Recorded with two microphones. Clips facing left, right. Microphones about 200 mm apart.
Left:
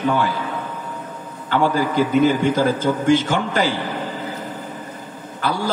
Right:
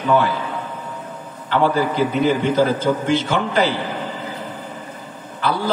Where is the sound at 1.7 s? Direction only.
45° left (ahead or behind).